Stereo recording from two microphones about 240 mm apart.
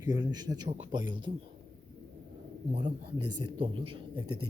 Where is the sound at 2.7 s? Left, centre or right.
Right.